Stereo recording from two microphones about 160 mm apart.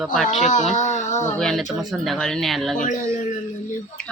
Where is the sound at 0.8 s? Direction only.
50° left (ahead or behind).